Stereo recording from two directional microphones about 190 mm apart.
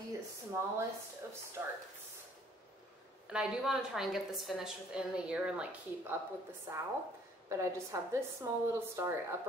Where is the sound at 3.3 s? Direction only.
5° right (ahead or behind).